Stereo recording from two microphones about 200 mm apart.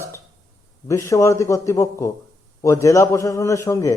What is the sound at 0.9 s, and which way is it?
Speech, 15° left (ahead or behind).